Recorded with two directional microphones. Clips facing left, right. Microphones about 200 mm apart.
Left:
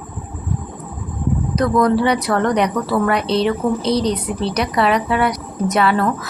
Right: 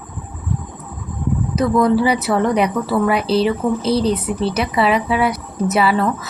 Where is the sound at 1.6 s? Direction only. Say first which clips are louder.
Right 1 dB; 5° right (ahead or behind).